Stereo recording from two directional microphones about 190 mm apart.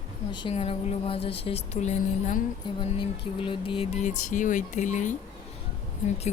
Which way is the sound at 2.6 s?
25° left (ahead or behind).